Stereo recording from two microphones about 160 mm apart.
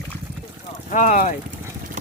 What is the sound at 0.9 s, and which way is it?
Speech, 50° left (ahead or behind).